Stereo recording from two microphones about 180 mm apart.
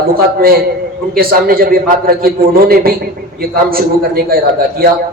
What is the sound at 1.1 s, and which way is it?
A man's voice, 55° right (ahead or behind).